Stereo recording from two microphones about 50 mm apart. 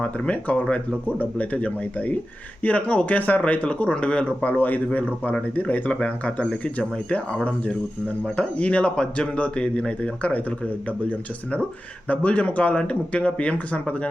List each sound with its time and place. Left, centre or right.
0.0 s speech: left
4.5 s speech: left; by 6.6 s centre
8.4 s speech: left
12.0 s speech: left